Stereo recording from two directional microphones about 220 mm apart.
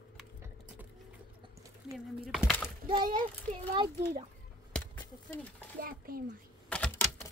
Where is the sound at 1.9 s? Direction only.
Centre (ahead or behind).